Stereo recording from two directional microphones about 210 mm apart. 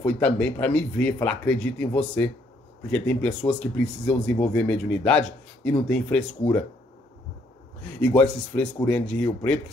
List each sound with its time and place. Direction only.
0.0 s speech: 5° left (ahead or behind)
7.8 s speech: 5° left (ahead or behind)